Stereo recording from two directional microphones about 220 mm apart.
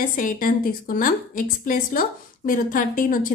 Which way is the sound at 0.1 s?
40° left (ahead or behind).